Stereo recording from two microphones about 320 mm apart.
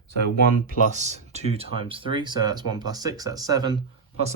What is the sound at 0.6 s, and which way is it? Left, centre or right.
Speech, right.